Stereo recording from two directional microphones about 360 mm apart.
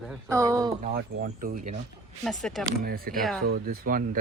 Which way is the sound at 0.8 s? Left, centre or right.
Right.